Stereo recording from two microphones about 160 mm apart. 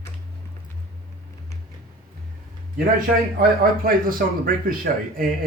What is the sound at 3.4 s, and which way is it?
A man's voice, 60° right (ahead or behind).